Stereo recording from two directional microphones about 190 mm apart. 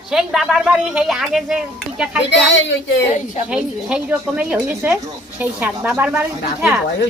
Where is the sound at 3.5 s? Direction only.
5° right (ahead or behind).